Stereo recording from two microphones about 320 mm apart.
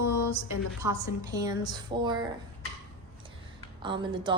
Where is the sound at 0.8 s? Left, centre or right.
Centre.